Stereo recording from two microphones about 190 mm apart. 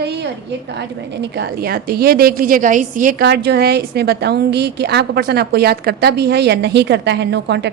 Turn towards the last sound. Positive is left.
turn(degrees=-65)  # may be behind; listen again after turning